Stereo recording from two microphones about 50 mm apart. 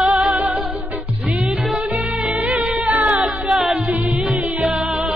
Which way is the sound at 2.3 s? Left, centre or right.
Right.